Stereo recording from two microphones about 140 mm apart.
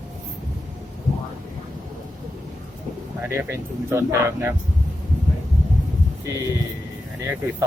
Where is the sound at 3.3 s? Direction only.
20° right (ahead or behind).